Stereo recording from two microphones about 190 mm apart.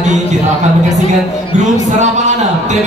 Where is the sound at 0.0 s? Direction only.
40° right (ahead or behind).